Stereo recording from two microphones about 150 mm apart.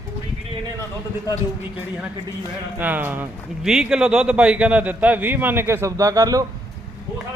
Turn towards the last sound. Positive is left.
turn(degrees=-25)  # may be behind; listen again after turning